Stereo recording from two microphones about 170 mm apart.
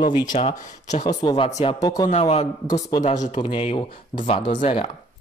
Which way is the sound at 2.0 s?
35° left (ahead or behind).